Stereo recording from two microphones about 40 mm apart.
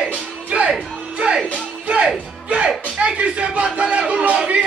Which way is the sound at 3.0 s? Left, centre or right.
Right.